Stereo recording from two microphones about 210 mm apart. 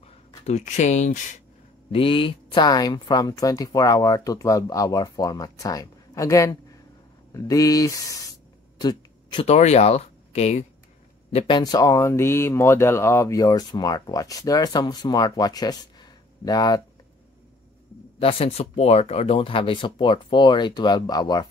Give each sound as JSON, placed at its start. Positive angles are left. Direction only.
{"t": 0.0, "sound": "speech", "side_deg": 35}
{"t": 1.9, "sound": "speech", "side_deg": 25}
{"t": 18.2, "sound": "speech", "side_deg": 30}